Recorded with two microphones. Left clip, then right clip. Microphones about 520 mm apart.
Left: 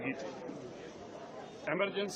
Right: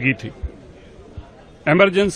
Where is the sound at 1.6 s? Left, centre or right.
Right.